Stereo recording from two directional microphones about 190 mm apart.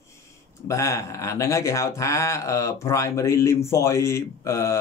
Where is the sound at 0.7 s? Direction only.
15° left (ahead or behind).